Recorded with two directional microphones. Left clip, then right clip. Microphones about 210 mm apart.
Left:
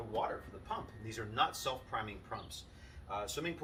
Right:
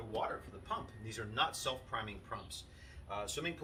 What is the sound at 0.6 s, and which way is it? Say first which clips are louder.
Speech: right 1 dB; centre (ahead or behind).